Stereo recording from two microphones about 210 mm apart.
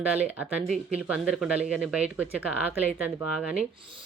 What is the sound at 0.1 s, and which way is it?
Speech, 5° right (ahead or behind).